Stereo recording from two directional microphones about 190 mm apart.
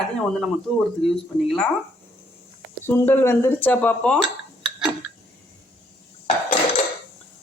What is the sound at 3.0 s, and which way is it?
Speech, 10° left (ahead or behind).